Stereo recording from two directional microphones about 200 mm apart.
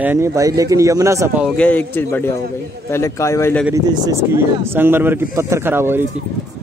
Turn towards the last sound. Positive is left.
turn(degrees=-10)  # may be behind; listen again after turning